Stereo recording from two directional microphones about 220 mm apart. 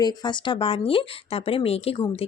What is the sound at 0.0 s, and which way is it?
Speech, 20° left (ahead or behind).